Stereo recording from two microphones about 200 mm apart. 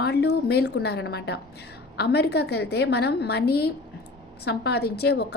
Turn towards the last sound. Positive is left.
turn(degrees=55)  # may be behind; listen again after turning